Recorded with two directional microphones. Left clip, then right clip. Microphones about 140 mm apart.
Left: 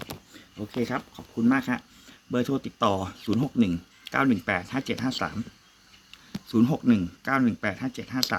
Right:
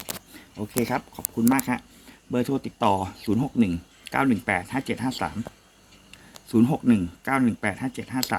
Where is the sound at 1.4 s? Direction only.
15° right (ahead or behind).